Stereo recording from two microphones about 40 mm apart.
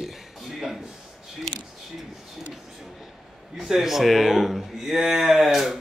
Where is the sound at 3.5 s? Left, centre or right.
Centre.